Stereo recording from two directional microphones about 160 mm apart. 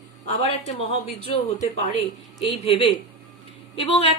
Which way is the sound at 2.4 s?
35° left (ahead or behind).